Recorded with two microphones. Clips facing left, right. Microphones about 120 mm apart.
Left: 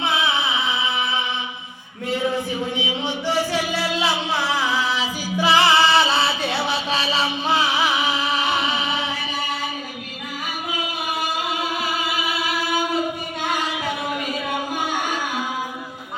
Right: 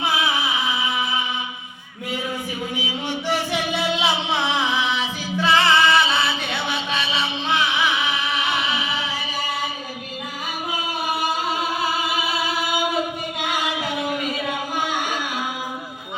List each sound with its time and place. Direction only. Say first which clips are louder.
0.0 s music: even; 25° left (ahead or behind)
2.7 s music: left 2 dB; 20° left (ahead or behind)
3.2 s music: left 2 dB; 15° right (ahead or behind)
4.9 s music: left 1 dB; 5° left (ahead or behind)
5.5 s music: left 1 dB; 30° left (ahead or behind)